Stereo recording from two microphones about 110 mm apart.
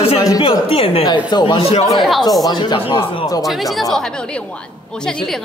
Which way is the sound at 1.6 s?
60° left (ahead or behind).